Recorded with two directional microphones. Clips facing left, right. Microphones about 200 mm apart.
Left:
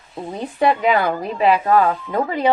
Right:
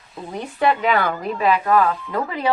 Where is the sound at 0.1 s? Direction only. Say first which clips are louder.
Left 3 dB; 20° left (ahead or behind).